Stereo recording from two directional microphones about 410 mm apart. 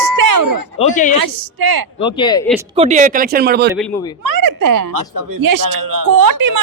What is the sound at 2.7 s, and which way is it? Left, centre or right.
Speech, centre.